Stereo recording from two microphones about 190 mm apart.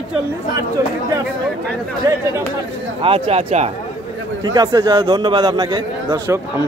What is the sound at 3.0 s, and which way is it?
Speech, 30° right (ahead or behind).